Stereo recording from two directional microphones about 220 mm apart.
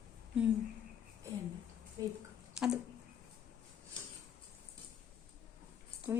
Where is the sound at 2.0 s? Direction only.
15° right (ahead or behind).